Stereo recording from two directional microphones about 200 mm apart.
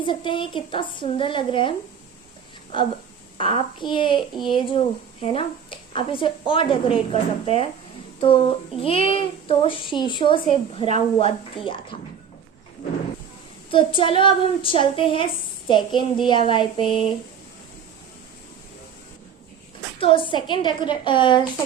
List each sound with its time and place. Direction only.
0.0 s a child's voice: 25° left (ahead or behind)
3.3 s a child's voice: 25° left (ahead or behind)
13.7 s a child's voice: 25° left (ahead or behind)
20.0 s a child's voice: 25° left (ahead or behind)